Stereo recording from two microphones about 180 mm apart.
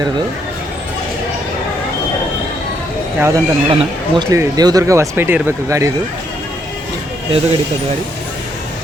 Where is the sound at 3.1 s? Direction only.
15° right (ahead or behind).